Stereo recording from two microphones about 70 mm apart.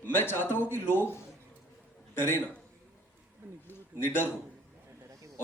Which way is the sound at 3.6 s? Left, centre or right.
Left.